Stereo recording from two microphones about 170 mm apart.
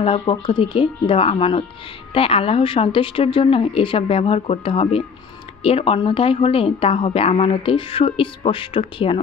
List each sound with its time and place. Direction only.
0.0 s a woman's voice: 30° left (ahead or behind)